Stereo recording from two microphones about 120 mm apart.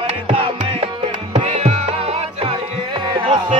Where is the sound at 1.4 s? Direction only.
75° right (ahead or behind).